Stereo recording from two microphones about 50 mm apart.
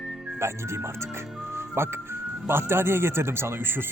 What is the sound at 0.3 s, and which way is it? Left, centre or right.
Speech, right.